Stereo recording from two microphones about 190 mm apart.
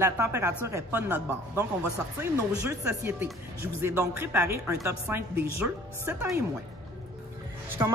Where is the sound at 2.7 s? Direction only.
10° right (ahead or behind).